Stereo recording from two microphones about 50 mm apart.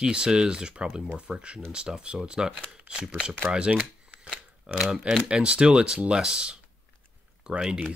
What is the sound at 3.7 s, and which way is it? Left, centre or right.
Shuffling cards, right.